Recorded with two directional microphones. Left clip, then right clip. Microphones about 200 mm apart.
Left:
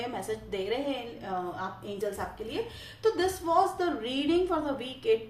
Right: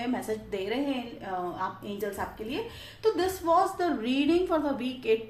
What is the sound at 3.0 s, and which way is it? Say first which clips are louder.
A woman's voice: right 1 dB; 40° right (ahead or behind).